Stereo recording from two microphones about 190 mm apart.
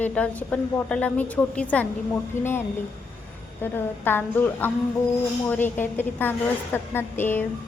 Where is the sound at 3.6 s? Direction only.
10° left (ahead or behind).